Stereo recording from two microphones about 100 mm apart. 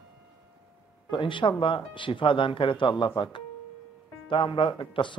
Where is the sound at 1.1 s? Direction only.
55° left (ahead or behind).